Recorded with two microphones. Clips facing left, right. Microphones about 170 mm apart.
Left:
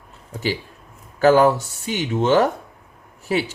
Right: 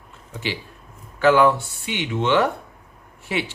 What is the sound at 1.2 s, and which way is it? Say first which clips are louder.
Speech: left 2 dB; 40° left (ahead or behind).